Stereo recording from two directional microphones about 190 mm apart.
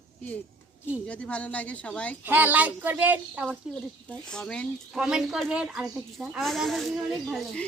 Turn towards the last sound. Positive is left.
turn(degrees=0)  # may be behind; listen again after turning